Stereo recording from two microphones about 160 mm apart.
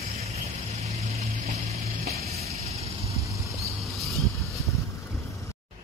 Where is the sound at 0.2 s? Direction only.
40° right (ahead or behind).